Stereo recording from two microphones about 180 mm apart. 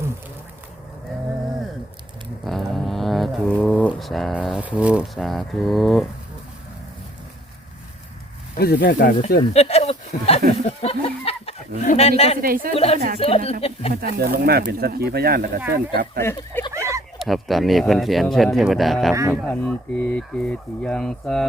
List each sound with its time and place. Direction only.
2.5 s a sound: centre (ahead or behind)
3.8 s speech: centre (ahead or behind)
8.5 s speech: 60° left (ahead or behind)
9.5 s a sound: 35° left (ahead or behind)
10.5 s speech: 35° left (ahead or behind)
12.4 s a woman's voice: 55° right (ahead or behind)
12.7 s speech: 35° left (ahead or behind)
13.9 s speech: 60° right (ahead or behind)
16.2 s speech: 15° left (ahead or behind)
16.7 s a sound: 15° right (ahead or behind)
17.2 s speech: centre (ahead or behind)
19.1 s speech: 15° right (ahead or behind)
19.5 s speech: 10° left (ahead or behind)